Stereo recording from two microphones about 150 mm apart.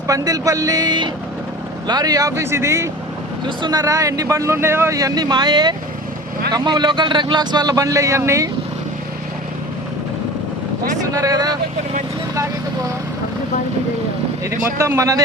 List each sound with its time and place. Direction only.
0.1 s speech: 25° right (ahead or behind)
11.1 s speech: 25° right (ahead or behind)
14.8 s speech: 20° right (ahead or behind)